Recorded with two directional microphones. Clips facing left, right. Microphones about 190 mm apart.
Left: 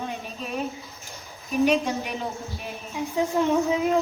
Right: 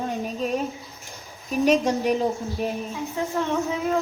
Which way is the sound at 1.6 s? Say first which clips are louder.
Right 3 dB; 40° right (ahead or behind).